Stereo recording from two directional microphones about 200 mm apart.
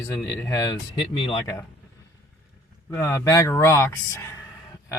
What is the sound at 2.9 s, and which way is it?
Speech, 15° left (ahead or behind).